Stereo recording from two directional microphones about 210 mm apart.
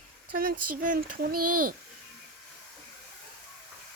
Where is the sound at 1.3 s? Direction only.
90° right.